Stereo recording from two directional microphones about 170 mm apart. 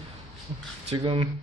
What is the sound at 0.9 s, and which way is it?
Speech, 30° right (ahead or behind).